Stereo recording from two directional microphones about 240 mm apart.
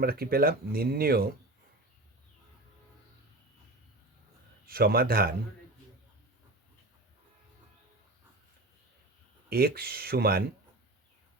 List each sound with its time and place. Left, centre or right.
0.0 s speech: right
4.6 s speech: right
9.5 s speech: right